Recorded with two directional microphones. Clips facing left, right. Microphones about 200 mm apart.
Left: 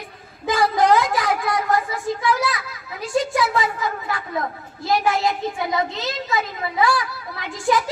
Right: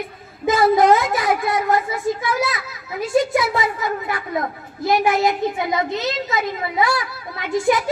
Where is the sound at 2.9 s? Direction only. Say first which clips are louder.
Right 3 dB; 20° right (ahead or behind).